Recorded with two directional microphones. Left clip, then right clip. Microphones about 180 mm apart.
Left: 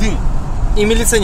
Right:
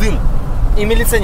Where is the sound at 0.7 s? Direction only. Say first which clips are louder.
Left 2 dB; 45° left (ahead or behind).